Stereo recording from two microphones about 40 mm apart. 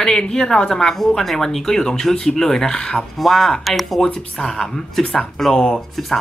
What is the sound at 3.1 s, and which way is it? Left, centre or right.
Speech, centre.